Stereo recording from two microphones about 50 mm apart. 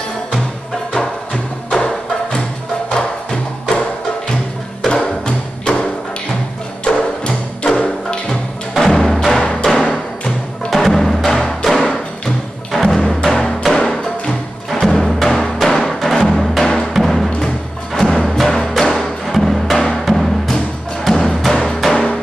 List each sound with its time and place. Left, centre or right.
0.9 s music: centre
4.8 s music: centre
9.4 s music: left
10.7 s music: centre
16.9 s timpani: centre
17.9 s music: centre